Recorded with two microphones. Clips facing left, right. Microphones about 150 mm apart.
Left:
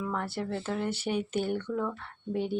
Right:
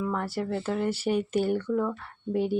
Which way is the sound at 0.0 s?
5° right (ahead or behind).